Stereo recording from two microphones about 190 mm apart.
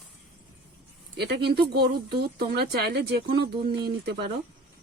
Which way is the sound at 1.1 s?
60° right (ahead or behind).